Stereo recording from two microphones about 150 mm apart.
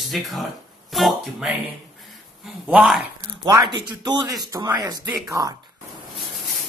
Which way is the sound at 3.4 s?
25° right (ahead or behind).